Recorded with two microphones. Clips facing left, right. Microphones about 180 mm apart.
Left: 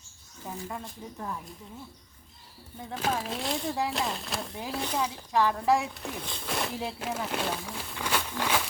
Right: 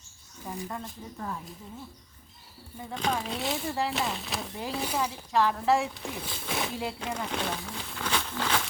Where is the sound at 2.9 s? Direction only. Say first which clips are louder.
Even; 5° left (ahead or behind).